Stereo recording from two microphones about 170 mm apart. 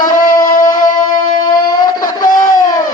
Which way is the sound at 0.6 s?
25° left (ahead or behind).